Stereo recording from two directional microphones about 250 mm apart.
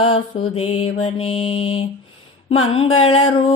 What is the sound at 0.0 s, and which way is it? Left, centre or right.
Mantra, left.